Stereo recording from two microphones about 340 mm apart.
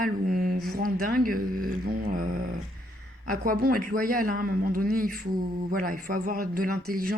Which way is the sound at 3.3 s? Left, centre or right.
Right.